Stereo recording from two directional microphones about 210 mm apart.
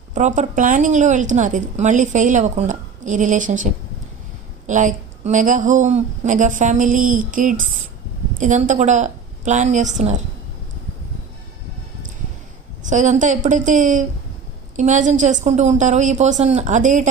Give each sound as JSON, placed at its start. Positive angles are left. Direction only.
{"t": 0.1, "sound": "a woman's voice", "side_deg": -35}
{"t": 12.9, "sound": "a woman's voice", "side_deg": -35}